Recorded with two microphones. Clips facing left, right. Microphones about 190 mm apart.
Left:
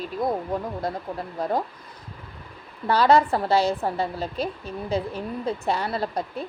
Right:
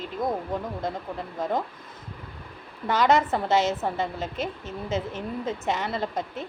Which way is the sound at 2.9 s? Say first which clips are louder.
Left 3 dB; 20° right (ahead or behind).